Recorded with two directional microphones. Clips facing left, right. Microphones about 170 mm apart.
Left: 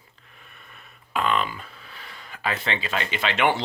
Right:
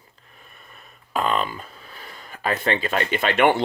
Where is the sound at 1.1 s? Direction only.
40° right (ahead or behind).